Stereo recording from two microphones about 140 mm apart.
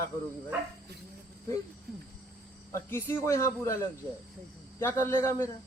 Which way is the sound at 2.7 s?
20° left (ahead or behind).